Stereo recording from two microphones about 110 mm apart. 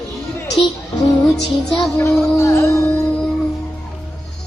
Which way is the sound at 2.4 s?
25° left (ahead or behind).